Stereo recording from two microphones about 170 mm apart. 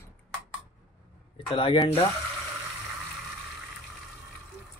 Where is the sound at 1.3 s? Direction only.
30° left (ahead or behind).